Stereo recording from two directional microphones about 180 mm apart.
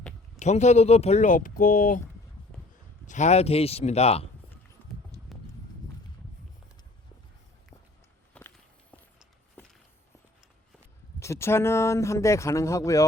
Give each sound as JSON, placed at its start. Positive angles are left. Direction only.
{"t": 0.3, "sound": "speech", "side_deg": 40}
{"t": 3.1, "sound": "speech", "side_deg": 40}
{"t": 4.8, "sound": "horse", "side_deg": 10}
{"t": 8.3, "sound": "walk", "side_deg": 10}
{"t": 11.2, "sound": "speech", "side_deg": 15}